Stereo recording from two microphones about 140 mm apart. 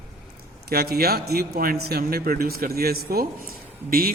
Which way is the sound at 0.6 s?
90° right.